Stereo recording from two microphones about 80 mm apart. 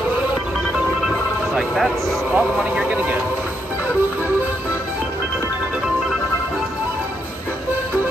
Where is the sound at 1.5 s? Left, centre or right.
Centre.